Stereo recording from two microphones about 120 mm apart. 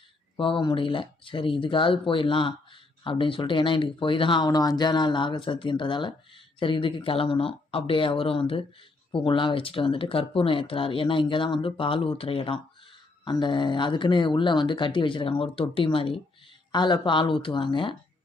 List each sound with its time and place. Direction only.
0.3 s speech: 45° left (ahead or behind)
13.2 s speech: 40° left (ahead or behind)